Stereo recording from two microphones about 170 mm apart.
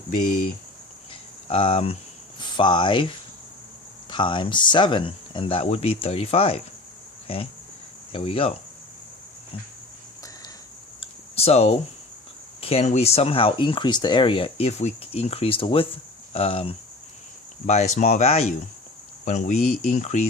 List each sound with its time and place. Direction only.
1.5 s speech: 35° left (ahead or behind)
4.1 s speech: 30° left (ahead or behind)
11.0 s a sound: 35° left (ahead or behind)
12.5 s speech: 35° left (ahead or behind)